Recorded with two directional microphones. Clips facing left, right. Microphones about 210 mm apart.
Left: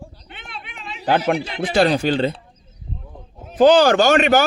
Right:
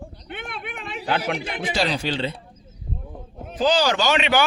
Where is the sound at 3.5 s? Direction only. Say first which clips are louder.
Left 8 dB; 55° left (ahead or behind).